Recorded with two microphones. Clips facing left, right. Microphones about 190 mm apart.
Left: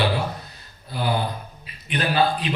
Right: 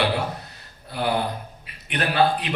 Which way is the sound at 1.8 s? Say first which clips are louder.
Even; 65° right (ahead or behind).